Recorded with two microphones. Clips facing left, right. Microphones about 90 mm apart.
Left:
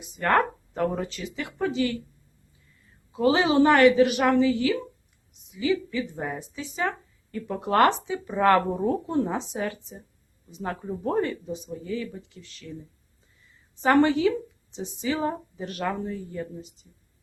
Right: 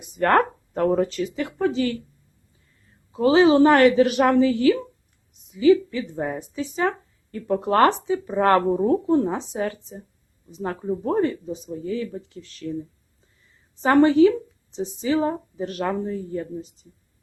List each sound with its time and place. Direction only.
0.2 s speech: 45° right (ahead or behind)
3.1 s speech: 30° right (ahead or behind)
13.8 s speech: 35° right (ahead or behind)